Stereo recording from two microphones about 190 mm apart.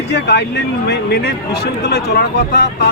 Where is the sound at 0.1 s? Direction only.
60° left (ahead or behind).